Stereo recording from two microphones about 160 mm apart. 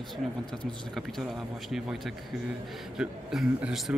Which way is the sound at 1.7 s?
Centre (ahead or behind).